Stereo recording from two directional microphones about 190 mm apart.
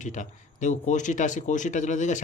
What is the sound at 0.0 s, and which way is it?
Speech, 40° left (ahead or behind).